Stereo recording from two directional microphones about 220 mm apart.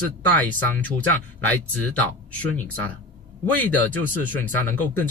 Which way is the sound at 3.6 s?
10° left (ahead or behind).